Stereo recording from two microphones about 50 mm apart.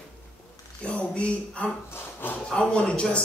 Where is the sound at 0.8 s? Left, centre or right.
Left.